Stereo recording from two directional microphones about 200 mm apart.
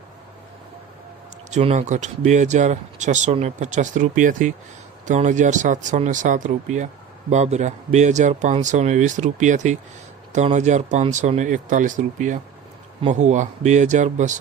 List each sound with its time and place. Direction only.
1.5 s speech: 35° right (ahead or behind)